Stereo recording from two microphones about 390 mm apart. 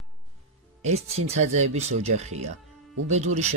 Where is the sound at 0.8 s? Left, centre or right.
Centre.